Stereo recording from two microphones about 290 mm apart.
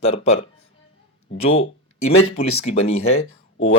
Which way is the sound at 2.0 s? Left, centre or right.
Left.